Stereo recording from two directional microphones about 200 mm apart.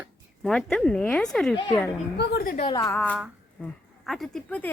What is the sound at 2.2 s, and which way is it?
Speech, 45° left (ahead or behind).